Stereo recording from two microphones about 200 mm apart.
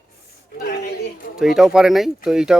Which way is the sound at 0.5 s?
50° left (ahead or behind).